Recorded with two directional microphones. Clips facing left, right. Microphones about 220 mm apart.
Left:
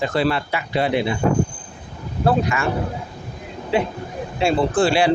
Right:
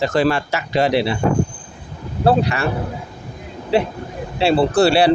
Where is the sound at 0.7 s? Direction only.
90° right.